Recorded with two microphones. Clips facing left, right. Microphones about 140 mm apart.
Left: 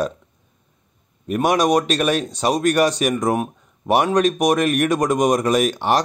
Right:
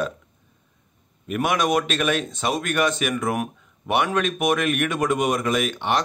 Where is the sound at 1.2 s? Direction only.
35° left (ahead or behind).